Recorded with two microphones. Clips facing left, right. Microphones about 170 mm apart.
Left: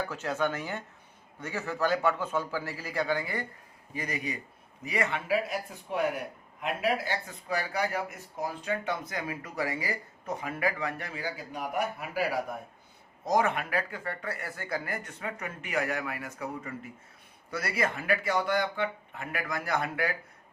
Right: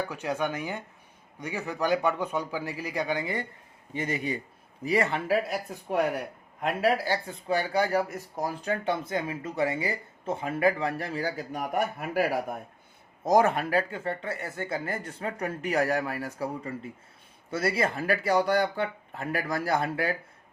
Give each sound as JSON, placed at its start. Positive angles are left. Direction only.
{"t": 0.1, "sound": "a man's voice", "side_deg": -15}
{"t": 6.6, "sound": "speech", "side_deg": -35}
{"t": 13.2, "sound": "speech", "side_deg": -40}